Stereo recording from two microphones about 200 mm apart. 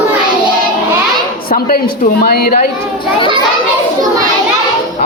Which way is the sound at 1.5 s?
50° left (ahead or behind).